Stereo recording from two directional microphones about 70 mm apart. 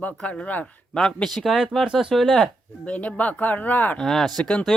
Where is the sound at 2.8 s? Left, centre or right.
Centre.